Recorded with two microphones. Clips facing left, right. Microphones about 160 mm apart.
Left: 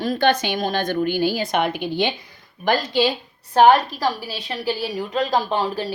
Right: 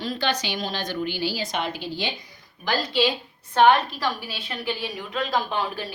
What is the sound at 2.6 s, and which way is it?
A woman's voice, 50° left (ahead or behind).